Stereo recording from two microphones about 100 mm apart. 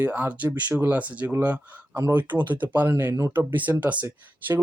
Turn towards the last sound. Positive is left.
turn(degrees=-20)  # may be behind; listen again after turning